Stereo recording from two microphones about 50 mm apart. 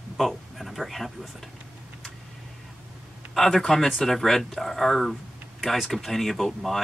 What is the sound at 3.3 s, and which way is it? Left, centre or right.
Speech, centre.